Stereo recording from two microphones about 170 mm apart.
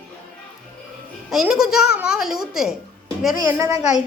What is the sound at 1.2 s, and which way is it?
A woman's voice, 5° right (ahead or behind).